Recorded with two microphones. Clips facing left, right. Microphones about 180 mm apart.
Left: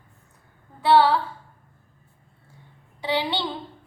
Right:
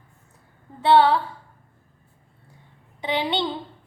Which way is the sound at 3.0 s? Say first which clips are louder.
Right 1 dB; 20° right (ahead or behind).